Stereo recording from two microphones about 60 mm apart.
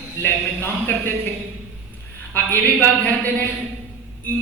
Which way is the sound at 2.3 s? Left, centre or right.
Left.